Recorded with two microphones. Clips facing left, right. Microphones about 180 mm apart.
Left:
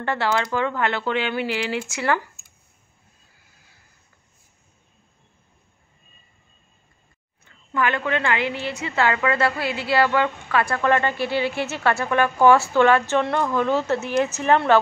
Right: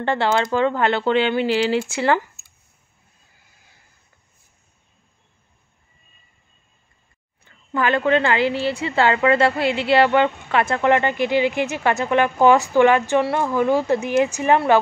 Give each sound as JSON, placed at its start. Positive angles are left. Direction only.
{"t": 0.0, "sound": "a woman's voice", "side_deg": -25}
{"t": 7.7, "sound": "a woman's voice", "side_deg": -35}